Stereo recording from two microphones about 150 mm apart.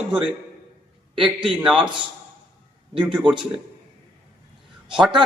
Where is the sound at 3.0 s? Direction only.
10° right (ahead or behind).